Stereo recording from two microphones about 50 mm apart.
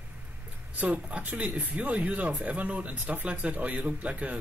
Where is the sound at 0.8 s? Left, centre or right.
Right.